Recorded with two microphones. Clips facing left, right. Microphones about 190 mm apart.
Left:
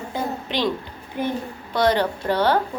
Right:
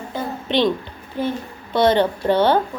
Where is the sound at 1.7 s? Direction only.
25° right (ahead or behind).